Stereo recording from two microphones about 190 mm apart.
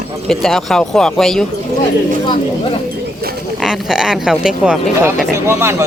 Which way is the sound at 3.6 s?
5° right (ahead or behind).